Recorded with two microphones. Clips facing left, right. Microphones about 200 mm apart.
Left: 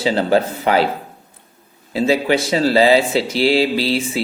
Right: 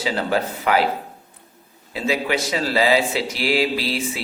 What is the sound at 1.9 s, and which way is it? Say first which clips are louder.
Speech: left 6 dB; 30° left (ahead or behind).